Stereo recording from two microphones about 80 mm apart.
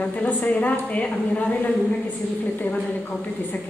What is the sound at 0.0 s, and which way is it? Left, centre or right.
A woman's voice, centre.